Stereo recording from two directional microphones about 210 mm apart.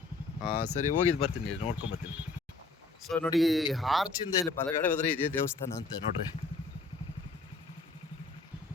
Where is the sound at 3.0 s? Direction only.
5° left (ahead or behind).